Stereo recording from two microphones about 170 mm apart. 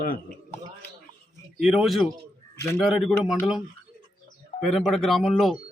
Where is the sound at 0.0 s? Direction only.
60° left (ahead or behind).